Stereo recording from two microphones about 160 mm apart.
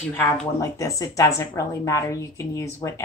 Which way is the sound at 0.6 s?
20° left (ahead or behind).